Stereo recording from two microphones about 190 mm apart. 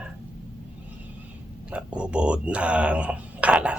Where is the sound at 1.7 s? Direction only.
5° right (ahead or behind).